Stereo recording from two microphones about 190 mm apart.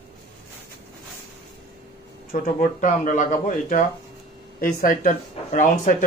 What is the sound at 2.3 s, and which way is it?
Speech, 45° left (ahead or behind).